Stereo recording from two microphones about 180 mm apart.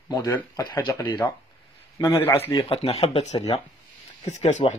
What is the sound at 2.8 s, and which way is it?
Speech, 35° left (ahead or behind).